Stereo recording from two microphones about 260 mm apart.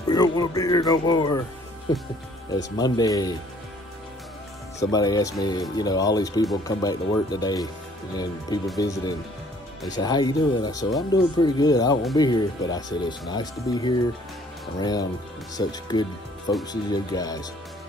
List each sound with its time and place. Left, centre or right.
0.1 s speech: centre
2.5 s speech: centre
4.7 s speech: centre
8.7 s speech: centre